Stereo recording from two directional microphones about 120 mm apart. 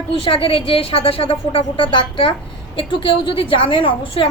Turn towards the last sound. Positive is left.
turn(degrees=45)  # may be behind; listen again after turning